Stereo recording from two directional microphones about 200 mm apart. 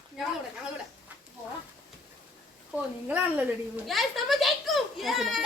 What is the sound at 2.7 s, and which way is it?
A woman's voice, 10° right (ahead or behind).